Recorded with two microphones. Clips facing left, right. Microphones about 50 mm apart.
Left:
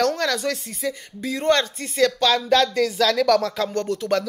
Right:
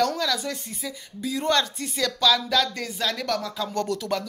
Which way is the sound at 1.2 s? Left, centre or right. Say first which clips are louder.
Left 3 dB; left.